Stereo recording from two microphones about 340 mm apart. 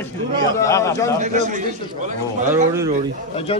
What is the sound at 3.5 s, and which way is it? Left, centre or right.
Speech, centre.